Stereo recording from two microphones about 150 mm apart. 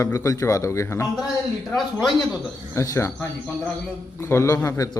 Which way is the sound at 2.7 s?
20° left (ahead or behind).